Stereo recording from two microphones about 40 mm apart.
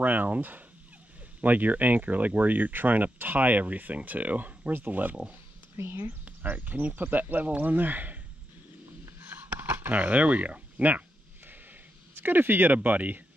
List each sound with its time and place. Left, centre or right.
0.0 s speech: right
5.8 s speech: right
6.2 s speech: right
9.3 s a sound: right
12.2 s speech: right
12.7 s speech: right